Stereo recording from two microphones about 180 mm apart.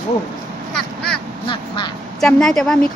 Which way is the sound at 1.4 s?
25° left (ahead or behind).